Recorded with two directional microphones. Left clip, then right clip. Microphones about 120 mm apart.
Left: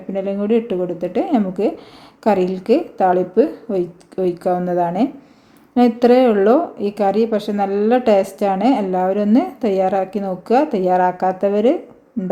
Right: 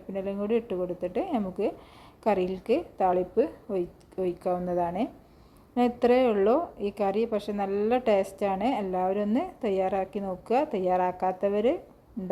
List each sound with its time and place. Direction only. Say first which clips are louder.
0.1 s a woman's voice: left 10 dB; 30° right (ahead or behind)